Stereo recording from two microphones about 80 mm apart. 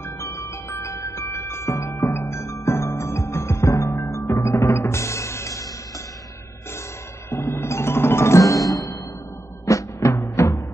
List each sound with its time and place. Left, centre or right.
0.2 s music: left
7.2 s music: left